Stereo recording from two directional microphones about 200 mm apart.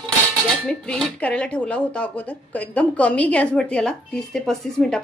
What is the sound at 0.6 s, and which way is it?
Speech, centre (ahead or behind).